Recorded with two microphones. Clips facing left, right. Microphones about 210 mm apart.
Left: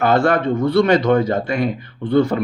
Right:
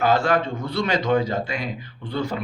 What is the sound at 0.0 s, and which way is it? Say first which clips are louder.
A man's voice: left 4 dB; 55° left (ahead or behind).